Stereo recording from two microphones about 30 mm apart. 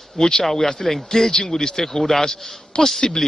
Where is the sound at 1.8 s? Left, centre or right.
Centre.